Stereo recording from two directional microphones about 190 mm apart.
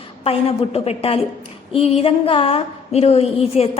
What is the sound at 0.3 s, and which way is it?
A woman's voice, 30° left (ahead or behind).